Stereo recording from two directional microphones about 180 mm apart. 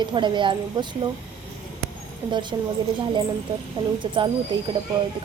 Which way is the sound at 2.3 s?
25° right (ahead or behind).